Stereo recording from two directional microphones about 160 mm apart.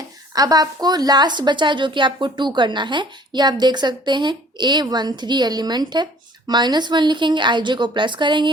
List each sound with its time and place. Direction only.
0.3 s a woman's voice: 25° right (ahead or behind)